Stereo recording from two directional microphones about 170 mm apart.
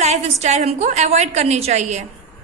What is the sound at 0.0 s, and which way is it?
A woman's voice, 40° right (ahead or behind).